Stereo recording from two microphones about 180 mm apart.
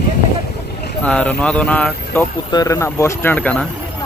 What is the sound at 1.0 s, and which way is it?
Speech, 5° left (ahead or behind).